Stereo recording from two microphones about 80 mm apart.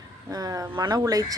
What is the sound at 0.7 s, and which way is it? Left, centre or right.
Speech, right.